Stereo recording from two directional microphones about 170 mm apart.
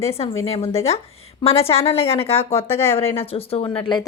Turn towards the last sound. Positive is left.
turn(degrees=30)  # may be behind; listen again after turning